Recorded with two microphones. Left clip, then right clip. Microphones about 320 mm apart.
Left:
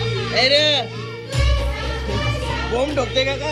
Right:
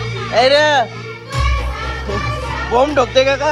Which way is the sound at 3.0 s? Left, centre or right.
Right.